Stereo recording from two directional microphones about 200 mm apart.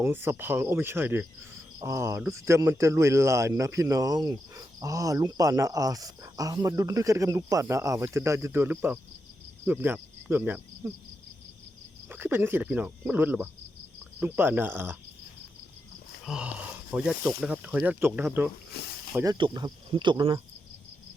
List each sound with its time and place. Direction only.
0.0 s speech: 10° right (ahead or behind)
9.6 s cricket: 10° right (ahead or behind)
12.0 s speech: 10° right (ahead or behind)
16.2 s speech: 5° right (ahead or behind)
19.1 s speech: 15° right (ahead or behind)